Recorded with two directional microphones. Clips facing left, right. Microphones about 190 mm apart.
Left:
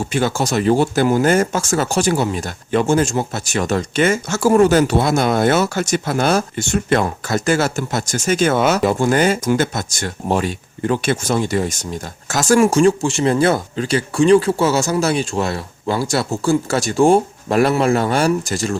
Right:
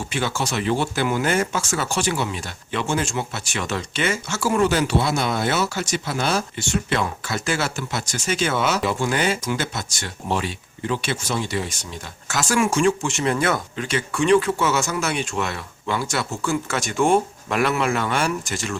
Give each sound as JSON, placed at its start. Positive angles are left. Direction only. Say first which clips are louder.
{"t": 0.0, "sound": "speech", "louder": "left 6 dB", "side_deg": 45}